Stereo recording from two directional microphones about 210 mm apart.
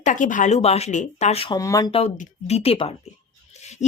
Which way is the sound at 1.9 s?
30° left (ahead or behind).